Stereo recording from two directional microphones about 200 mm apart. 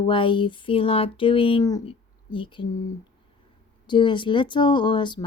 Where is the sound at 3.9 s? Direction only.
25° left (ahead or behind).